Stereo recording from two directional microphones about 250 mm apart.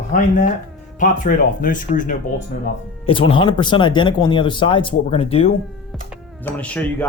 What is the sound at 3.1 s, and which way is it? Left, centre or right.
Speech, centre.